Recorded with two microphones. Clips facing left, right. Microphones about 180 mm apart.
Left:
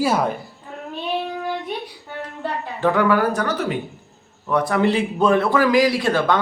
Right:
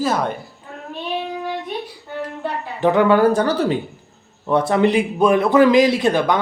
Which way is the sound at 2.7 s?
20° right (ahead or behind).